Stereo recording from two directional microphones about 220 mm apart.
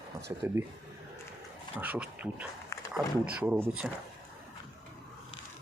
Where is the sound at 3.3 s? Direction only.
5° right (ahead or behind).